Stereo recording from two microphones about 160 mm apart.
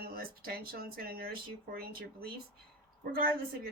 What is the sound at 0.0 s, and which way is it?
Speech, 65° right (ahead or behind).